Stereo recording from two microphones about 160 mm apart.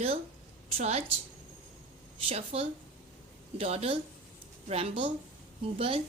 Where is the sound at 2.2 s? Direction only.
40° right (ahead or behind).